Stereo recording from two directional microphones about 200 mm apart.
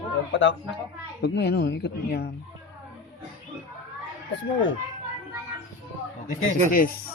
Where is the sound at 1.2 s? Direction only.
55° left (ahead or behind).